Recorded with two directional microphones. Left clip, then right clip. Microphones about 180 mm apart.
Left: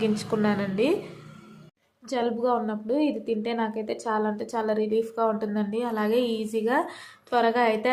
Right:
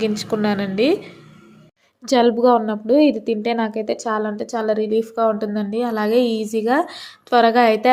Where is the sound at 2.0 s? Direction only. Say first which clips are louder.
Right 11 dB; 40° right (ahead or behind).